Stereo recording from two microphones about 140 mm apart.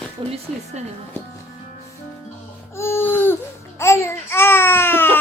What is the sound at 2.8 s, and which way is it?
Baby cry, 15° left (ahead or behind).